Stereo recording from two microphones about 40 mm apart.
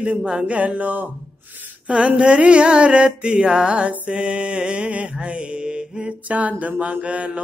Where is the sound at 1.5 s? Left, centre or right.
Right.